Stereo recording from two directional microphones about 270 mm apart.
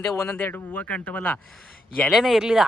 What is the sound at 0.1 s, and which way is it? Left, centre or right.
Speech, centre.